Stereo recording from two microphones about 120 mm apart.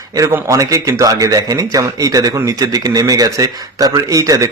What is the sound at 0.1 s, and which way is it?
A man's voice, 25° right (ahead or behind).